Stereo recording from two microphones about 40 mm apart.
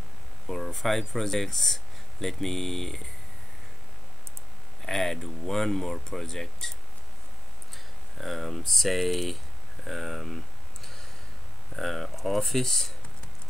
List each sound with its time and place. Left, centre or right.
0.5 s speech: centre
4.8 s speech: centre
7.7 s speech: centre
11.7 s speech: centre